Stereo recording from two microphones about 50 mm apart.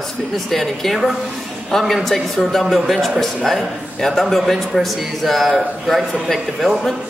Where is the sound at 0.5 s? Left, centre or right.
Centre.